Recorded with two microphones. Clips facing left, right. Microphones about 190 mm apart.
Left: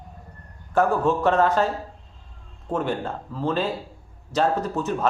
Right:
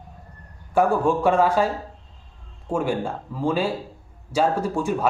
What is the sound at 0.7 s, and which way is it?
Speech, 10° right (ahead or behind).